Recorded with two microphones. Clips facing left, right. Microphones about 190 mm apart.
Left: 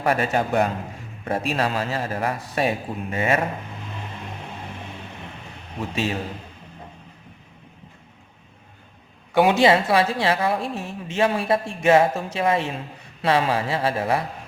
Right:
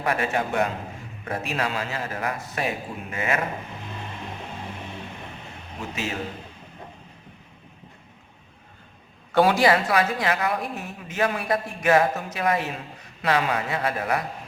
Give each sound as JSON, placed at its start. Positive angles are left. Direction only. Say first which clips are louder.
{"t": 0.0, "sound": "a man's voice", "louder": "left 3 dB", "side_deg": 35}
{"t": 9.3, "sound": "a woman's voice", "louder": "left 2 dB", "side_deg": 20}